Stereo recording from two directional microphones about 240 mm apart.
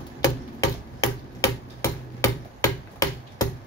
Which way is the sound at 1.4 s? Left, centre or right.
Centre.